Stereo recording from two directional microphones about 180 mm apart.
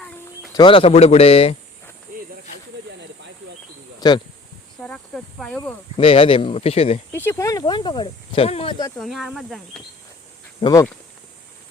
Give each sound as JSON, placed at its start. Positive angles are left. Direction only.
{"t": 0.5, "sound": "speech", "side_deg": 30}
{"t": 4.0, "sound": "speech", "side_deg": 20}
{"t": 4.8, "sound": "snake", "side_deg": 5}
{"t": 6.0, "sound": "speech", "side_deg": 30}
{"t": 7.3, "sound": "speech", "side_deg": 15}
{"t": 9.0, "sound": "speech", "side_deg": 0}
{"t": 10.6, "sound": "speech", "side_deg": 20}